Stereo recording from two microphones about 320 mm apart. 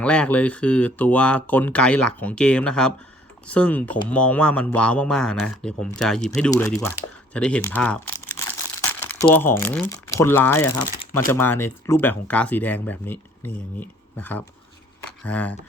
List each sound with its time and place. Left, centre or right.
0.0 s speech: centre
8.9 s crumpling: centre
9.3 s speech: centre